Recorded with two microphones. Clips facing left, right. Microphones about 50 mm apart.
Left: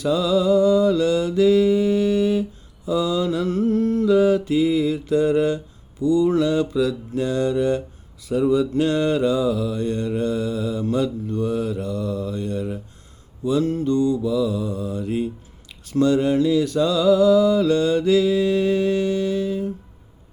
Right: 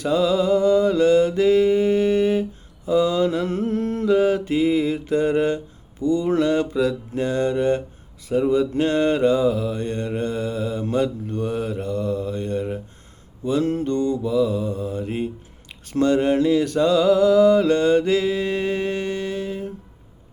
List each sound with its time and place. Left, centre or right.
0.0 s mantra: right